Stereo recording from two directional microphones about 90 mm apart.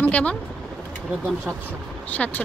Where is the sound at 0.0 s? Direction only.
15° left (ahead or behind).